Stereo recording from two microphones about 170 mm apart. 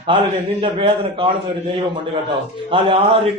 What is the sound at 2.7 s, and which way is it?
Speech, 30° right (ahead or behind).